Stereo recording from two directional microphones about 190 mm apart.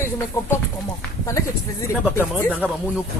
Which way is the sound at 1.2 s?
15° left (ahead or behind).